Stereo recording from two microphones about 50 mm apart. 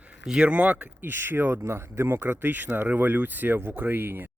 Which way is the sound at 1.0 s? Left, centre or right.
Right.